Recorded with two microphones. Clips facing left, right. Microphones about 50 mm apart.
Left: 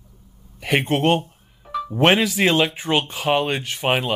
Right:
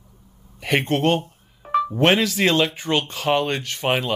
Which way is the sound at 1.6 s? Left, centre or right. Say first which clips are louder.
Right 7 dB; right.